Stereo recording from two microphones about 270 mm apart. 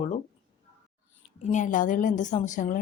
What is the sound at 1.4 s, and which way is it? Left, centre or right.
Speech, left.